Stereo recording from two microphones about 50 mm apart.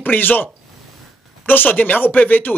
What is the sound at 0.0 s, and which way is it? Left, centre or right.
Speech, left.